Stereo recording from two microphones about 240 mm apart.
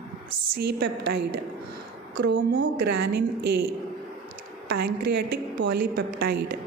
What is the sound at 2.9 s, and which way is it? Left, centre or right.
Speech, right.